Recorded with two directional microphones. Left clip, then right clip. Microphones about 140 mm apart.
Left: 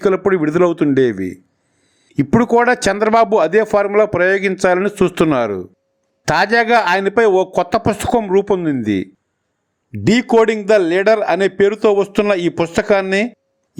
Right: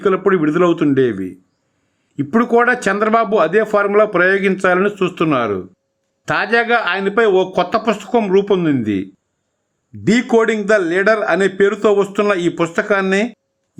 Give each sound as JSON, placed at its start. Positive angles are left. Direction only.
{"t": 0.0, "sound": "a man's voice", "side_deg": 35}